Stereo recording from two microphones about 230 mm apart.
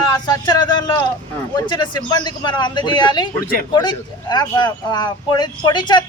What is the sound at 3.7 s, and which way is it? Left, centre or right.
Speech, centre.